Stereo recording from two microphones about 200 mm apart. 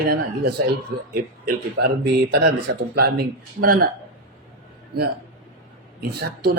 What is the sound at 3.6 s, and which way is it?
Speech, 45° right (ahead or behind).